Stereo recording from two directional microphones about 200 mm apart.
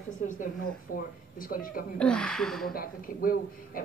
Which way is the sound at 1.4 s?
45° left (ahead or behind).